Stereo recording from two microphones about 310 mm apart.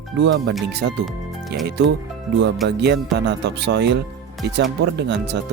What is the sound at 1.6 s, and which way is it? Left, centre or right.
Speech, right.